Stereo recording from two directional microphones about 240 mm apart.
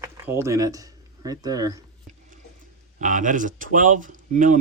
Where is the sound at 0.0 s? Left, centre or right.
Centre.